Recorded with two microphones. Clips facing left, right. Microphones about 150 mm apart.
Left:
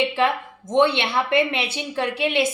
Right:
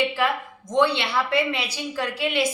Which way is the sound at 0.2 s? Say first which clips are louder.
Left 3 dB; 25° left (ahead or behind).